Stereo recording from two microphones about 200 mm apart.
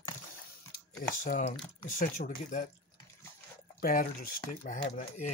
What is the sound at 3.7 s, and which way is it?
Speech, 45° left (ahead or behind).